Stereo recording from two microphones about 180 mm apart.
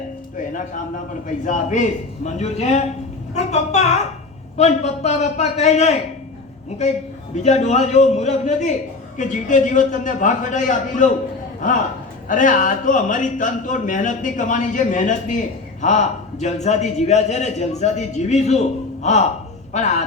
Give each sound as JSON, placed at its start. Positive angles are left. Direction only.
{"t": 1.5, "sound": "a man's voice", "side_deg": 45}
{"t": 7.3, "sound": "a man's voice", "side_deg": 40}